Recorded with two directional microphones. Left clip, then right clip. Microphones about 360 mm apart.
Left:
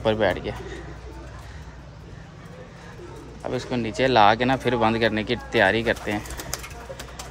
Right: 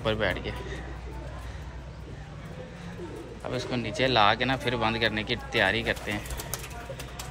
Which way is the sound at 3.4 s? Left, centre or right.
Centre.